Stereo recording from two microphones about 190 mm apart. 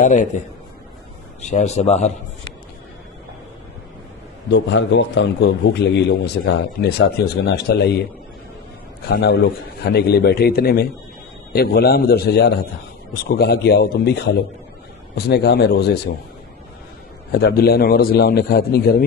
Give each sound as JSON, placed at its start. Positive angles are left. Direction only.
{"t": 0.0, "sound": "a man's voice", "side_deg": 40}
{"t": 1.5, "sound": "a man's voice", "side_deg": 35}
{"t": 4.5, "sound": "a man's voice", "side_deg": 70}
{"t": 9.1, "sound": "a man's voice", "side_deg": 60}
{"t": 15.1, "sound": "a man's voice", "side_deg": 60}
{"t": 17.3, "sound": "a man's voice", "side_deg": 55}